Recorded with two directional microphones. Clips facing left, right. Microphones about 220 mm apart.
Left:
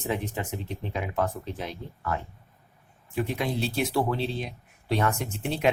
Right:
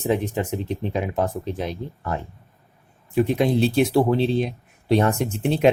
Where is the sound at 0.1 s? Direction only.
20° right (ahead or behind).